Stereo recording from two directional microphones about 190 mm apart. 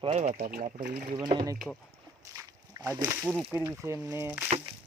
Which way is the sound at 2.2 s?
15° right (ahead or behind).